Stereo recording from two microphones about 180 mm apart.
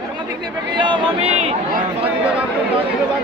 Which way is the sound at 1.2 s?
35° right (ahead or behind).